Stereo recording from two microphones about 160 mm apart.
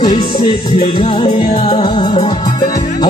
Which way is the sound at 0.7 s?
40° left (ahead or behind).